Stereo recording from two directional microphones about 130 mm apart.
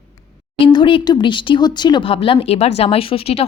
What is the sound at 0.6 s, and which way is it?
Speech, 40° left (ahead or behind).